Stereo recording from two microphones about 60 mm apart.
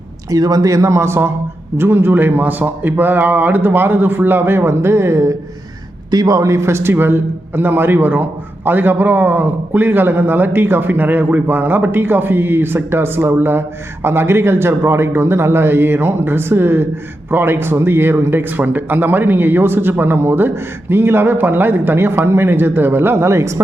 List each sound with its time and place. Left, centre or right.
0.3 s a man's voice: right
6.1 s a man's voice: right